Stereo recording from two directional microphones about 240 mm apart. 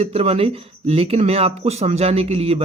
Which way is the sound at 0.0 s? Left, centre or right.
Right.